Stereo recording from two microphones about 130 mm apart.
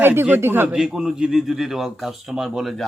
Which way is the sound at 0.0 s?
15° right (ahead or behind).